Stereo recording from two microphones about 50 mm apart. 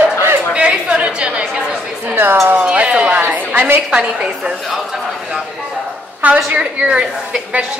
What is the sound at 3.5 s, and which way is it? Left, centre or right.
Speech, right.